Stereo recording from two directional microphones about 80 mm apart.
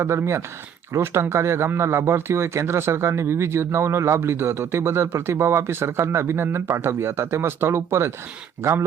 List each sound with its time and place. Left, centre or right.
0.0 s speech: right